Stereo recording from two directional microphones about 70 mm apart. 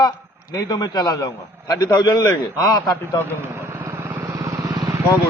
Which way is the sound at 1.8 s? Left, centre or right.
Left.